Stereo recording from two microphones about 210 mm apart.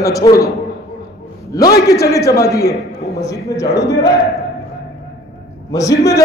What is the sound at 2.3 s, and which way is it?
A man's voice, 15° left (ahead or behind).